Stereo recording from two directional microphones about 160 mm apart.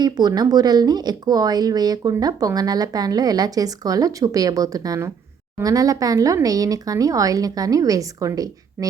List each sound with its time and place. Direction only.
0.0 s speech: 25° right (ahead or behind)